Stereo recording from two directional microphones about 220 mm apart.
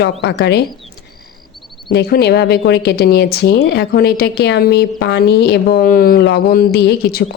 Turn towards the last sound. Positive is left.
turn(degrees=50)  # may be behind; listen again after turning